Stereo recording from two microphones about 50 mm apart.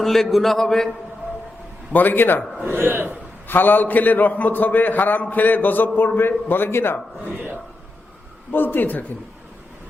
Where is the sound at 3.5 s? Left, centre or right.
Left.